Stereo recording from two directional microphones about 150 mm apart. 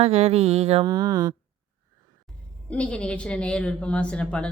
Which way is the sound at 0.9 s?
25° right (ahead or behind).